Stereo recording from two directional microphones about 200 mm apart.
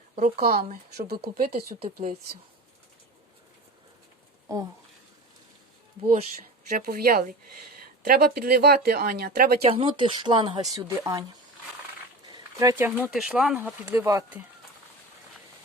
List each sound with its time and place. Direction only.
0.2 s speech: 45° right (ahead or behind)
4.4 s speech: 15° right (ahead or behind)
6.0 s speech: 30° right (ahead or behind)
6.7 s speech: 45° right (ahead or behind)
9.6 s speech: 25° right (ahead or behind)
12.3 s a sound: 15° right (ahead or behind)
13.0 s speech: centre (ahead or behind)